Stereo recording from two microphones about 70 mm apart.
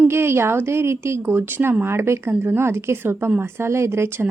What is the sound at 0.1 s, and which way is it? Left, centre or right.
A woman's voice, right.